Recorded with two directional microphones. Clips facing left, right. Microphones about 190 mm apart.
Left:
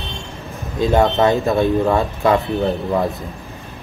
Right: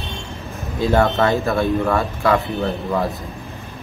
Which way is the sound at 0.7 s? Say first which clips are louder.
Left 2 dB; 15° left (ahead or behind).